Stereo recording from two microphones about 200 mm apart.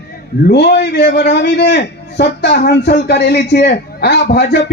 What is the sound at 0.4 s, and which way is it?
A man's voice, 55° left (ahead or behind).